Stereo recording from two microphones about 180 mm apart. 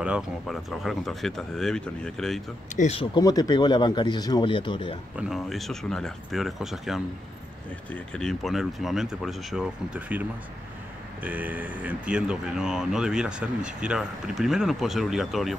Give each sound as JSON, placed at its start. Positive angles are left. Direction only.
{"t": 0.0, "sound": "speech", "side_deg": -5}
{"t": 2.7, "sound": "speech", "side_deg": 40}
{"t": 3.0, "sound": "speech", "side_deg": 20}
{"t": 5.1, "sound": "speech", "side_deg": 0}
{"t": 11.2, "sound": "speech", "side_deg": -10}